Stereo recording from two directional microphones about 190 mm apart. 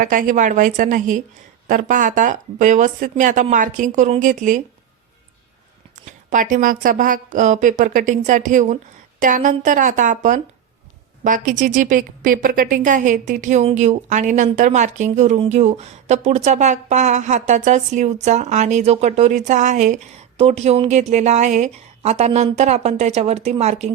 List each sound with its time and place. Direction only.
0.0 s speech: 45° right (ahead or behind)
6.1 s a woman's voice: 45° right (ahead or behind)